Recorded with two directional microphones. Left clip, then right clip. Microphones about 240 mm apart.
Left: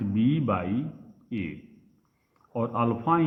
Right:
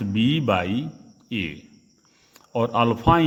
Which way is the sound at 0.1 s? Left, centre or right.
Right.